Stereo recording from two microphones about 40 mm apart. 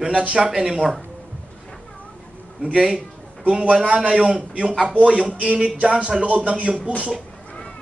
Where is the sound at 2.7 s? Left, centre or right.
Centre.